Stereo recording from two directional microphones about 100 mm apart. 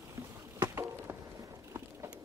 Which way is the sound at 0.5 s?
25° right (ahead or behind).